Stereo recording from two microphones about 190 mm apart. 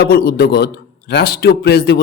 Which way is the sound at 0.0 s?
55° left (ahead or behind).